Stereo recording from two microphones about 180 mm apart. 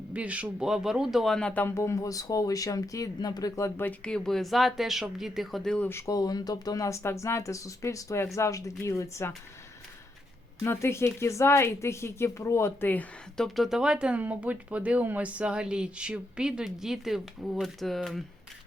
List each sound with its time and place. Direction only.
0.1 s speech: 5° right (ahead or behind)
6.1 s speech: 20° left (ahead or behind)
10.6 s speech: 15° left (ahead or behind)